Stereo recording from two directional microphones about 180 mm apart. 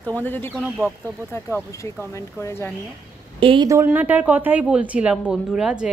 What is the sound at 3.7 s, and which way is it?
Speech, 10° right (ahead or behind).